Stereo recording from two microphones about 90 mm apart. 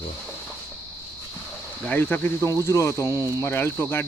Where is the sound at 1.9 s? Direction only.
20° left (ahead or behind).